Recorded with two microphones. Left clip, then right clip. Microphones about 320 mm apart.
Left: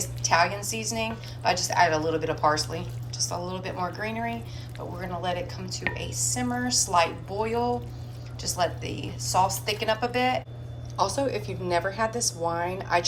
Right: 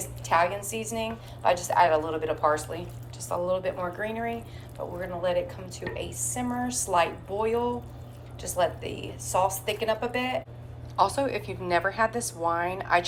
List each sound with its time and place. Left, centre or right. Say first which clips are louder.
0.0 s a woman's voice: left 1 dB; centre